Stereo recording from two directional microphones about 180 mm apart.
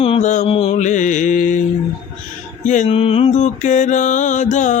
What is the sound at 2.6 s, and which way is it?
Mantra, 45° left (ahead or behind).